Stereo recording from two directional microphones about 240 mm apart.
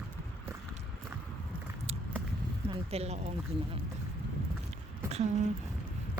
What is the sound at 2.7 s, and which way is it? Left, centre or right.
Speech, right.